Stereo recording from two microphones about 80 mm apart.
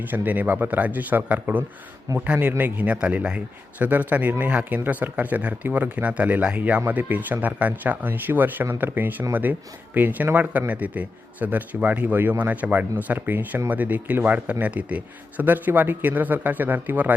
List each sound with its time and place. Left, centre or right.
0.1 s speech: right